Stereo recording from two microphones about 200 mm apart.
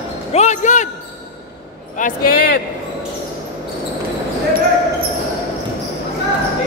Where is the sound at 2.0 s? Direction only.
45° left (ahead or behind).